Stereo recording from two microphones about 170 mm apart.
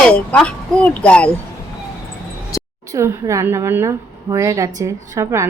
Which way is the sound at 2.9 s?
15° right (ahead or behind).